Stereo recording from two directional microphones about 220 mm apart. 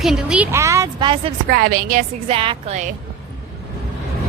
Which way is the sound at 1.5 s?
40° right (ahead or behind).